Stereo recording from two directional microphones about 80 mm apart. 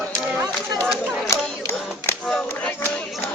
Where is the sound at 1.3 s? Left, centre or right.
Left.